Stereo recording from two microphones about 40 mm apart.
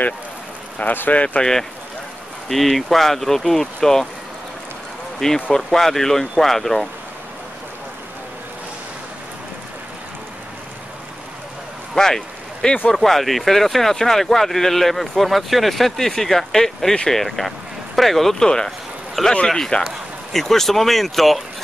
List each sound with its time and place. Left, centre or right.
0.8 s speech: left
1.4 s speech: centre
5.2 s speech: centre
11.9 s speech: centre
18.4 s speech: centre